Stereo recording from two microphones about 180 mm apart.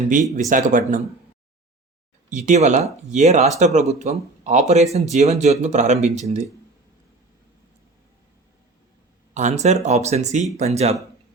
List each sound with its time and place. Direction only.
0.5 s speech: 45° right (ahead or behind)
2.3 s speech: 40° right (ahead or behind)
9.3 s speech: 40° right (ahead or behind)